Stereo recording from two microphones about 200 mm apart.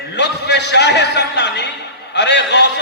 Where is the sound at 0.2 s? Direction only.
60° left (ahead or behind).